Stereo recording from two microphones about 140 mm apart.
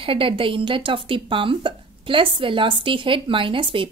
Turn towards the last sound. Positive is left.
turn(degrees=-40)  # may be behind; listen again after turning